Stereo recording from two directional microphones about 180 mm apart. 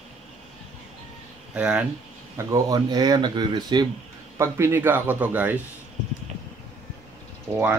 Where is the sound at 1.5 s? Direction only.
5° right (ahead or behind).